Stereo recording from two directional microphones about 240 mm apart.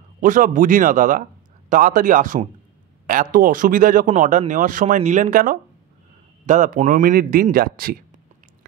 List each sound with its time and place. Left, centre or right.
0.2 s a man's voice: right